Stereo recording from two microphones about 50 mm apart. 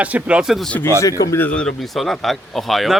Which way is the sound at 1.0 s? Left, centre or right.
Left.